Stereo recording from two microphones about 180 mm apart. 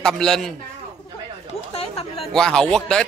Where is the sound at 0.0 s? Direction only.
5° left (ahead or behind).